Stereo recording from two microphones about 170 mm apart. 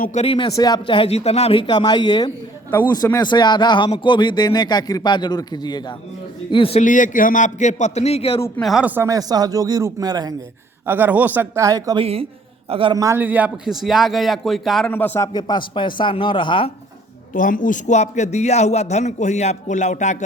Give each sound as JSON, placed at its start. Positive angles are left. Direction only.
{"t": 0.0, "sound": "a man's voice", "side_deg": 45}
{"t": 6.8, "sound": "a man's voice", "side_deg": 50}
{"t": 8.6, "sound": "a man's voice", "side_deg": 0}
{"t": 9.0, "sound": "speech", "side_deg": -20}
{"t": 10.8, "sound": "a man's voice", "side_deg": -10}
{"t": 12.6, "sound": "a man's voice", "side_deg": -30}
{"t": 14.8, "sound": "a man's voice", "side_deg": 10}
{"t": 15.3, "sound": "a man's voice", "side_deg": 25}
{"t": 17.3, "sound": "a man's voice", "side_deg": 50}